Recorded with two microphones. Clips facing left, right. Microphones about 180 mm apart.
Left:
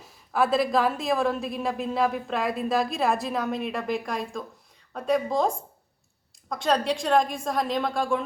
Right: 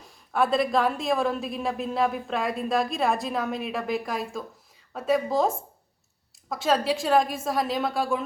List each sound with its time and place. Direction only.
0.0 s a woman's voice: centre (ahead or behind)